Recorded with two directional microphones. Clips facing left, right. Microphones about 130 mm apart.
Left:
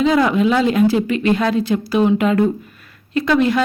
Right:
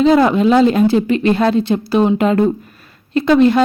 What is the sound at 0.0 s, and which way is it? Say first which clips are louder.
A woman's voice: right 4 dB; 35° right (ahead or behind).